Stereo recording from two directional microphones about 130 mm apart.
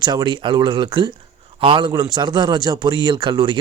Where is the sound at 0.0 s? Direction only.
30° right (ahead or behind).